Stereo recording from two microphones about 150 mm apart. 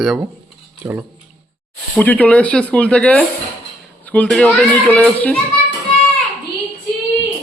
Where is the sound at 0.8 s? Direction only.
20° right (ahead or behind).